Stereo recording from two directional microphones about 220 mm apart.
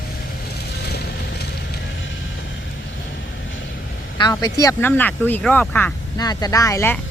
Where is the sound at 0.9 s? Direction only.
45° left (ahead or behind).